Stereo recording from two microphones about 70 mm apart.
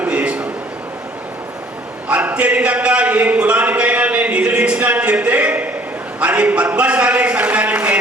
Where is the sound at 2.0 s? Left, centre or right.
Centre.